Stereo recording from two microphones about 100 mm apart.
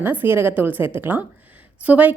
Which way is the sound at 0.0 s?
20° right (ahead or behind).